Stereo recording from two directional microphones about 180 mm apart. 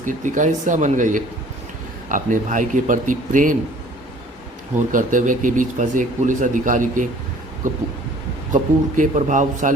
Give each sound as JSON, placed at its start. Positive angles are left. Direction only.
{"t": 0.0, "sound": "speech", "side_deg": -45}
{"t": 4.9, "sound": "speech", "side_deg": -45}
{"t": 8.5, "sound": "speech", "side_deg": -45}